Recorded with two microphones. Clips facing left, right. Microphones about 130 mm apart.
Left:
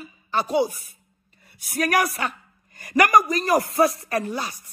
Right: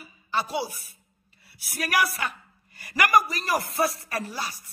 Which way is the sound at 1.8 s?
50° left (ahead or behind).